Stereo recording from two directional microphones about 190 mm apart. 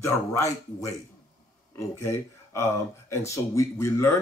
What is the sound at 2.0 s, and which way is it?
Speech, 15° left (ahead or behind).